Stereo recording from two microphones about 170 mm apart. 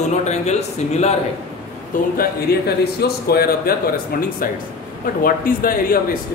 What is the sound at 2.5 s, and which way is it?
Speech, 65° left (ahead or behind).